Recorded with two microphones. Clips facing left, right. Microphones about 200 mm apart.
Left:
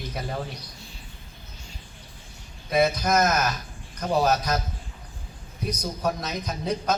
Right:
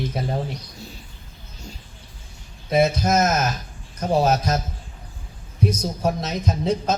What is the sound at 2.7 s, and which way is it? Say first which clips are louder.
A man's voice: right 3 dB; 25° right (ahead or behind).